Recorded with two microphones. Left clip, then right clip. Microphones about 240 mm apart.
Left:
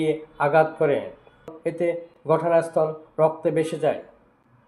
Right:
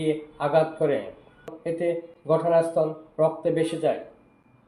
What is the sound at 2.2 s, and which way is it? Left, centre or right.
Speech, left.